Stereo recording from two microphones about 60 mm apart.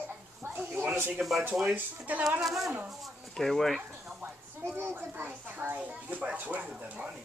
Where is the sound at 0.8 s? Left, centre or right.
Right.